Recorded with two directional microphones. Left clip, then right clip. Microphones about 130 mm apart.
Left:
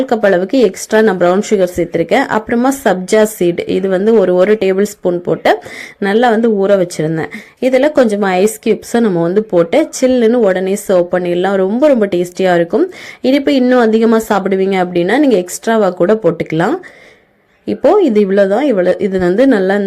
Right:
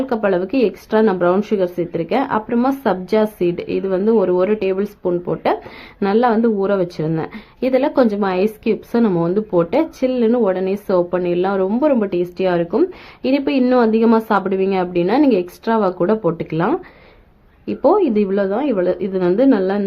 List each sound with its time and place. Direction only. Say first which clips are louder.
0.1 s speech: left 7 dB; 35° left (ahead or behind)
6.0 s speech: left 4 dB; 25° left (ahead or behind)